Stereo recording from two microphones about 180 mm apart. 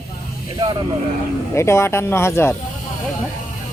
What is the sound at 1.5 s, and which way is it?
Speech, 15° left (ahead or behind).